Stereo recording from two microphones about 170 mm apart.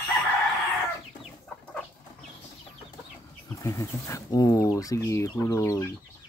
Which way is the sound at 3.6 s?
15° left (ahead or behind).